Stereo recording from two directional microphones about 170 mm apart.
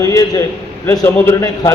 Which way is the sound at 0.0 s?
20° left (ahead or behind).